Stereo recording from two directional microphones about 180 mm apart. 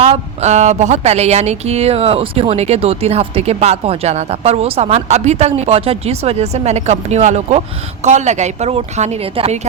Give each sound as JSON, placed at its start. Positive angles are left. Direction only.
{"t": 0.0, "sound": "speech", "side_deg": -35}